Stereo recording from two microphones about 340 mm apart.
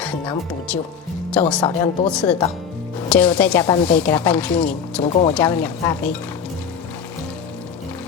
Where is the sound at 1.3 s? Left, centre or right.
Centre.